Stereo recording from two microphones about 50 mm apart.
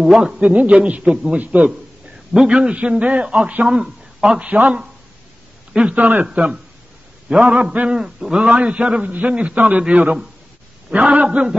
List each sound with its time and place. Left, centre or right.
0.0 s a man's voice: centre
0.5 s a man's voice: right
1.0 s a man's voice: centre
1.3 s a man's voice: right
2.3 s a man's voice: centre
4.4 s a man's voice: right
5.9 s a man's voice: right
6.3 s a man's voice: centre